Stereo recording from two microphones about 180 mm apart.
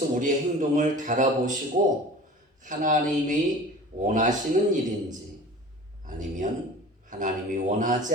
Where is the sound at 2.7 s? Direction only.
45° right (ahead or behind).